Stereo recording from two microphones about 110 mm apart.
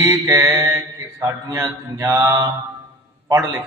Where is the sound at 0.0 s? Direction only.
25° right (ahead or behind).